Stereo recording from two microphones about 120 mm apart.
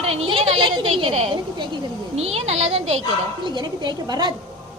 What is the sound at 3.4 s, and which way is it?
Speech, 40° right (ahead or behind).